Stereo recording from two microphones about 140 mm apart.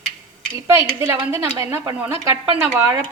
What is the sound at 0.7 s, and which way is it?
A woman's voice, 20° right (ahead or behind).